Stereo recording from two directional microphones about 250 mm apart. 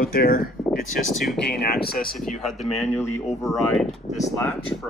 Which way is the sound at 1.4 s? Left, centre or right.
Left.